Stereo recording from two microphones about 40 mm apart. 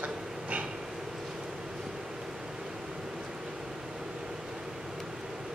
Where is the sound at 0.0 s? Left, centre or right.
Right.